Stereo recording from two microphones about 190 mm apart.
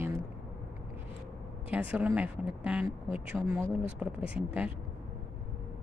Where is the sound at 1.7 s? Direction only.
5° right (ahead or behind).